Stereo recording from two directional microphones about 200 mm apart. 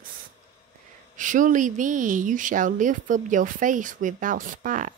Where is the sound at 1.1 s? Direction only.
40° right (ahead or behind).